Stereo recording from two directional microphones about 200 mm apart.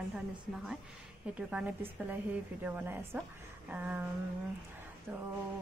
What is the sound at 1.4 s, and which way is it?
A woman's voice, 5° right (ahead or behind).